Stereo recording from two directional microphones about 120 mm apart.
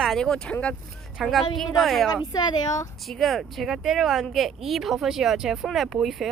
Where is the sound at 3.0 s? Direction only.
Centre (ahead or behind).